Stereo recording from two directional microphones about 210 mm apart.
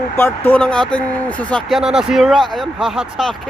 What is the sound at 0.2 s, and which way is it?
Speech, 10° left (ahead or behind).